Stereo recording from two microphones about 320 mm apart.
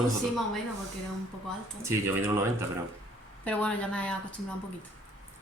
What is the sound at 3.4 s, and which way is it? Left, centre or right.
Speech, centre.